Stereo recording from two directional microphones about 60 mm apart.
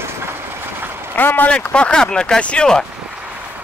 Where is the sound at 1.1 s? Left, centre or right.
Left.